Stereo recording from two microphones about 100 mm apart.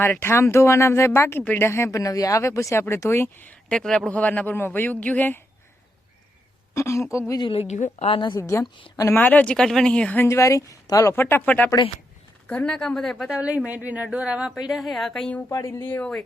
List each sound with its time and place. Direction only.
0.0 s speech: 25° left (ahead or behind)
6.7 s speech: 30° left (ahead or behind)
7.9 s a woman's voice: 75° left (ahead or behind)
8.4 s speech: 30° left (ahead or behind)
9.1 s speech: 15° left (ahead or behind)
10.2 s speech: 30° left (ahead or behind)
11.1 s speech: 20° left (ahead or behind)
13.3 s a woman's voice: 10° right (ahead or behind)
15.4 s speech: 30° left (ahead or behind); by 16.2 s 10° left (ahead or behind)